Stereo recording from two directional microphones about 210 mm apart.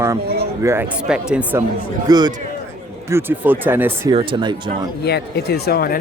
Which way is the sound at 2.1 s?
20° right (ahead or behind).